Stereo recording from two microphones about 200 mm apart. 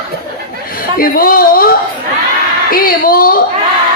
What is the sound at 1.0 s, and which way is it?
Speech, 45° left (ahead or behind).